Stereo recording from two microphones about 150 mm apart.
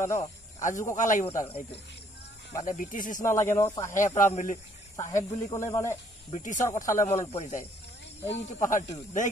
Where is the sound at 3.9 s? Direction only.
60° left (ahead or behind).